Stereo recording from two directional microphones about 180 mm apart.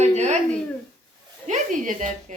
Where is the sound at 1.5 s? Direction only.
45° right (ahead or behind).